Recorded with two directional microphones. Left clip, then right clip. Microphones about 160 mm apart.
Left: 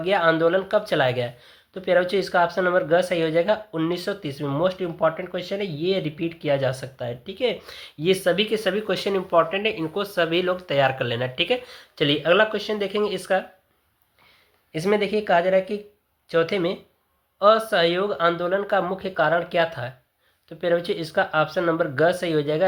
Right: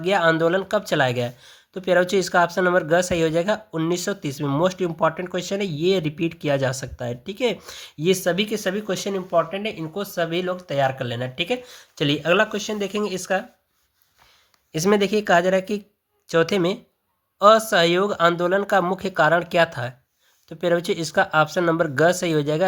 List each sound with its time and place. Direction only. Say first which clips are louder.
0.0 s speech: right 1 dB; 35° right (ahead or behind)
14.7 s speech: right 2 dB; 40° right (ahead or behind)